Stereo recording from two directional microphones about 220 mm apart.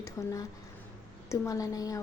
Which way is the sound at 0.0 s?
15° left (ahead or behind).